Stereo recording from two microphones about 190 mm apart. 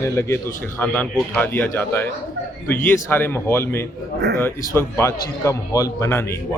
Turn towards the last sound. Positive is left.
turn(degrees=15)  # may be behind; listen again after turning